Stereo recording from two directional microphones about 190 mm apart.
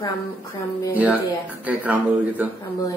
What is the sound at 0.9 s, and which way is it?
Speech, 10° right (ahead or behind).